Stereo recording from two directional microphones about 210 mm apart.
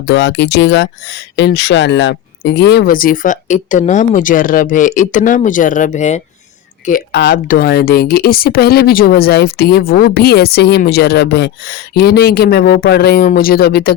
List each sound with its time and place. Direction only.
0.0 s speech: 55° left (ahead or behind); by 6.2 s 35° left (ahead or behind)
7.1 s speech: 50° left (ahead or behind)